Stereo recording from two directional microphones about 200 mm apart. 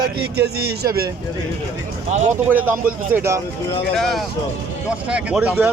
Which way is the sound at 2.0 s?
35° right (ahead or behind).